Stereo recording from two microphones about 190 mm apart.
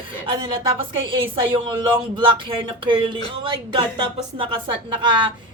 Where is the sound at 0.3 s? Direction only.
25° right (ahead or behind).